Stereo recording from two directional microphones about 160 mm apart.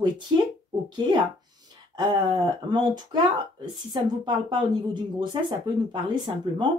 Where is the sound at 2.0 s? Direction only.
30° right (ahead or behind).